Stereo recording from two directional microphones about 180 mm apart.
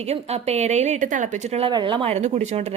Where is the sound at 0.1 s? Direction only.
35° right (ahead or behind).